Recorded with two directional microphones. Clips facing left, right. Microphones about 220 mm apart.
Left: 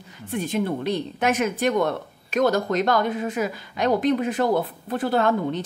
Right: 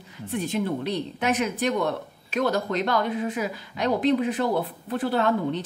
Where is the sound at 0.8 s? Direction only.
50° left (ahead or behind).